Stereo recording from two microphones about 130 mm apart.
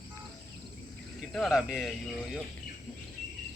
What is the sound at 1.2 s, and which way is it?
Speech, 5° left (ahead or behind).